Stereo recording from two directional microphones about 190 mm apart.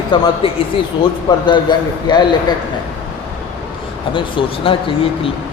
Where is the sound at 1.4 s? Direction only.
25° left (ahead or behind).